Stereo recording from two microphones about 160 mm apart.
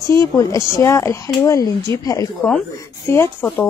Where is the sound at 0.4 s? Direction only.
20° left (ahead or behind).